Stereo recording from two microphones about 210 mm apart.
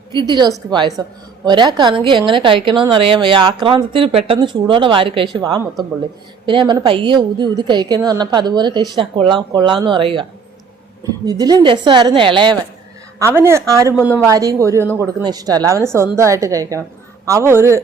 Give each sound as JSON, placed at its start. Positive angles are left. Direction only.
{"t": 0.1, "sound": "a woman's voice", "side_deg": -20}
{"t": 13.1, "sound": "speech", "side_deg": -10}